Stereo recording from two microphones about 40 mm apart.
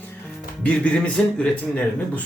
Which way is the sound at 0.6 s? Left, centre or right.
Left.